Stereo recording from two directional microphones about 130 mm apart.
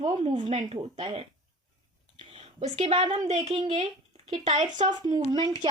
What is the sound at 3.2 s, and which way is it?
Speech, 55° right (ahead or behind).